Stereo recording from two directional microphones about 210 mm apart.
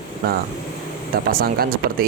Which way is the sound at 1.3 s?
45° right (ahead or behind).